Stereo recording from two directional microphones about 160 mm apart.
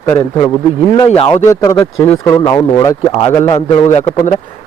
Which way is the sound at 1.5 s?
20° left (ahead or behind).